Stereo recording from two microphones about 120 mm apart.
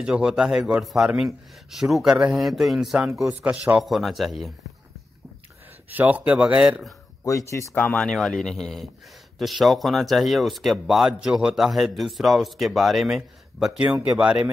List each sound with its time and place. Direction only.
0.0 s speech: 10° right (ahead or behind)
3.8 s speech: centre (ahead or behind)
5.9 s speech: 15° right (ahead or behind)
7.2 s speech: 25° left (ahead or behind)
7.7 s speech: 10° left (ahead or behind); by 14.5 s 10° right (ahead or behind)